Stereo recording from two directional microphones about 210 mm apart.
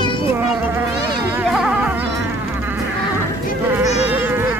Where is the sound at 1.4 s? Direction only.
5° right (ahead or behind).